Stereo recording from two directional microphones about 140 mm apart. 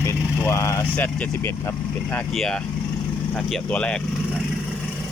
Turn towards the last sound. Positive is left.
turn(degrees=10)  # may be behind; listen again after turning